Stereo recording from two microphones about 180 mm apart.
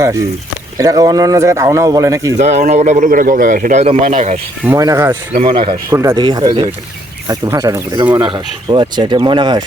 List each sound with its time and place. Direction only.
0.8 s speech: 20° right (ahead or behind)
2.4 s a man's voice: 40° right (ahead or behind)
4.6 s speech: 15° right (ahead or behind)
5.3 s speech: 30° right (ahead or behind)